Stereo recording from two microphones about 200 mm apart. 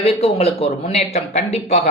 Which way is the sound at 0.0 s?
30° left (ahead or behind).